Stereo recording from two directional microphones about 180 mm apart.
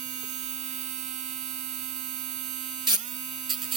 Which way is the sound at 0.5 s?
40° right (ahead or behind).